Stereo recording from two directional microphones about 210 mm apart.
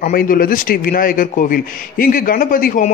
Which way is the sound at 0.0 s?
40° left (ahead or behind).